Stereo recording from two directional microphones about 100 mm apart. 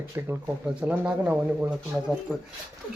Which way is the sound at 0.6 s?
10° right (ahead or behind).